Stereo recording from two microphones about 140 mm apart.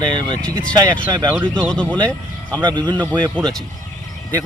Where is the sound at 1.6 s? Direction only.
5° left (ahead or behind).